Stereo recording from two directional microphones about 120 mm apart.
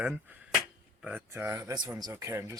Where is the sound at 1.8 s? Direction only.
25° right (ahead or behind).